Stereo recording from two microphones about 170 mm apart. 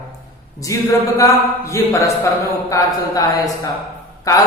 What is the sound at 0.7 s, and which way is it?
Speech, 20° left (ahead or behind).